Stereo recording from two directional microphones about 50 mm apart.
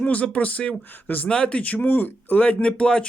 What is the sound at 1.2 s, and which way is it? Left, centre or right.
Speech, centre.